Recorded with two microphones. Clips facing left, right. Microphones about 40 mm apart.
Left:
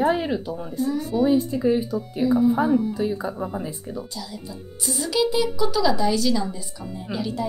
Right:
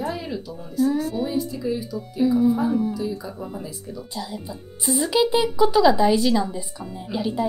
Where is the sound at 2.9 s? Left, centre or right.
Left.